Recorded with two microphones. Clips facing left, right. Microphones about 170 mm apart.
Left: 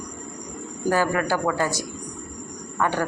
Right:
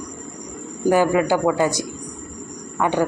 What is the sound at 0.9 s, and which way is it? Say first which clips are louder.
A man's voice: right 5 dB; 15° right (ahead or behind).